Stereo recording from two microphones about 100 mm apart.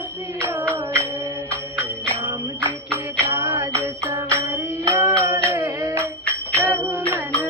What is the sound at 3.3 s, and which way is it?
Music, 25° right (ahead or behind).